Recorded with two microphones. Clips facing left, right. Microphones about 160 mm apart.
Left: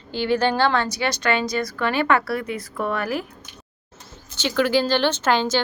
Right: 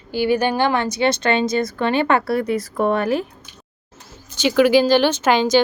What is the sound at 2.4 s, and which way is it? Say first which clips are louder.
Speech: right 7 dB; 40° right (ahead or behind).